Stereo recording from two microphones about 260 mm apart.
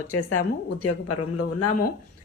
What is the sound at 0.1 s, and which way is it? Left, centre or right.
Speech, left.